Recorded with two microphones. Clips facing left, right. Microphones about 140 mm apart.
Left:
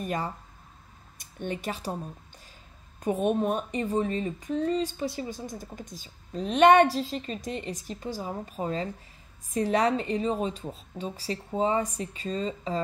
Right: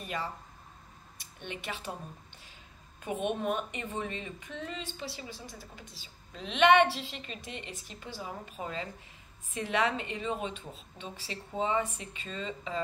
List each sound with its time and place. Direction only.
0.0 s speech: 45° left (ahead or behind)
3.0 s a woman's voice: 40° left (ahead or behind)